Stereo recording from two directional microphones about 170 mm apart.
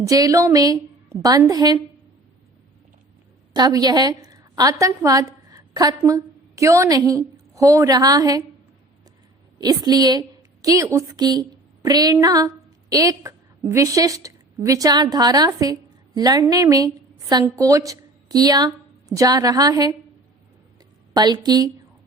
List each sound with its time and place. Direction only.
0.0 s a woman's voice: 20° right (ahead or behind)
3.5 s a woman's voice: 25° right (ahead or behind)
9.6 s a woman's voice: 25° right (ahead or behind)
21.1 s a woman's voice: 25° right (ahead or behind)